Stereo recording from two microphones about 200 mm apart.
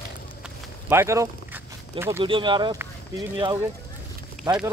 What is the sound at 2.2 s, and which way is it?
Speech, 25° right (ahead or behind).